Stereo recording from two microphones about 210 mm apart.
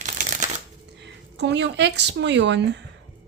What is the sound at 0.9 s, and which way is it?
Speech, 55° right (ahead or behind).